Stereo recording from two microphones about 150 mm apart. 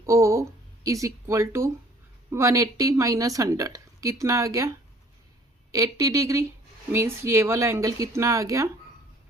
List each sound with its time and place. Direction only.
0.0 s a sound: 20° right (ahead or behind)
0.9 s a woman's voice: 20° right (ahead or behind)
5.7 s a woman's voice: 20° right (ahead or behind)